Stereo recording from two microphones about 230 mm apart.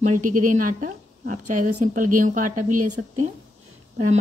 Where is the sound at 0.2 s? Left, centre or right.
Right.